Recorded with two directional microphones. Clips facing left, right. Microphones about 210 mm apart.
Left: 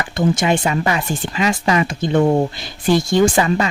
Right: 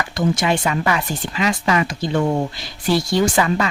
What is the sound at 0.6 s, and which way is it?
Speech, 30° left (ahead or behind).